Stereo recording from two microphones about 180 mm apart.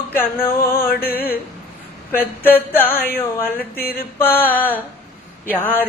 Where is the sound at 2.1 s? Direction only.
10° left (ahead or behind).